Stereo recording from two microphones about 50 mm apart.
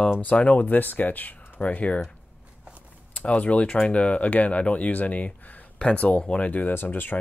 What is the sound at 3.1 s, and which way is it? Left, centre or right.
Speech, left.